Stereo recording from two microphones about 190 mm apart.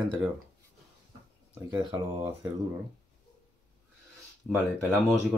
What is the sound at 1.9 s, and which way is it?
Speech, 25° right (ahead or behind).